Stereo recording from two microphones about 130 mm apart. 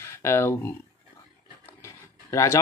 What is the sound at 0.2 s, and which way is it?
Speech, 20° left (ahead or behind).